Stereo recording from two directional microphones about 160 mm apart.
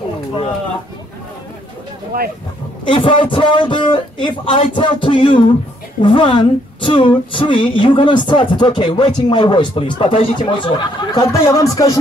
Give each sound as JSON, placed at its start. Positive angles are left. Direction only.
{"t": 2.1, "sound": "speech", "side_deg": -70}
{"t": 2.8, "sound": "speech", "side_deg": 35}
{"t": 11.3, "sound": "speech", "side_deg": 20}